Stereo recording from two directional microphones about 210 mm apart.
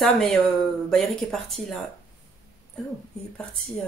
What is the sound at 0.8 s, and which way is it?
Speech, 5° left (ahead or behind).